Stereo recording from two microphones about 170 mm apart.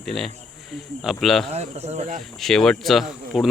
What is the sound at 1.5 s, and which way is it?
Speech, 40° right (ahead or behind).